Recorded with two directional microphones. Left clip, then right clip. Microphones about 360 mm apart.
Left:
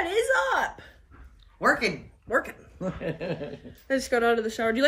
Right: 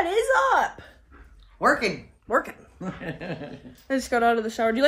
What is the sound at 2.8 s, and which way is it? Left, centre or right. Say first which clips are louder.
Speech: left 3 dB; centre.